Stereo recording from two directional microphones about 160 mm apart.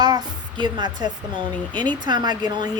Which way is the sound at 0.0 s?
25° right (ahead or behind).